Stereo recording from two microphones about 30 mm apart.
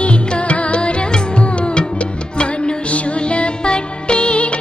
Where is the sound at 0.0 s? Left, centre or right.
Left.